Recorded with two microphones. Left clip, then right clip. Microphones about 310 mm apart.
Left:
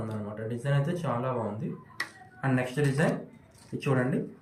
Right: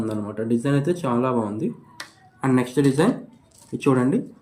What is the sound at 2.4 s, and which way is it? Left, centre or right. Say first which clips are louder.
Speech: right 8 dB; right.